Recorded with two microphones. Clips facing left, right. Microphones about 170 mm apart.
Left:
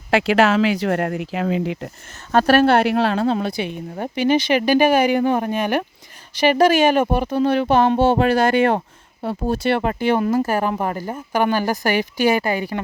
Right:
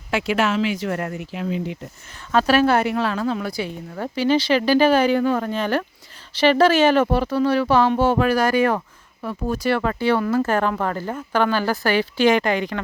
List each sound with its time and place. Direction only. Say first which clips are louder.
0.1 s speech: left 5 dB; 75° left (ahead or behind); by 1.9 s 90° left
2.3 s a woman's voice: left 3 dB; 55° left (ahead or behind); by 3.2 s 70° left (ahead or behind)
3.2 s speech: left 4 dB; 30° left (ahead or behind); by 12.8 s 10° left (ahead or behind)